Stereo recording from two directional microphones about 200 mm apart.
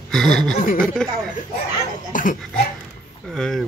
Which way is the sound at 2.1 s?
40° left (ahead or behind).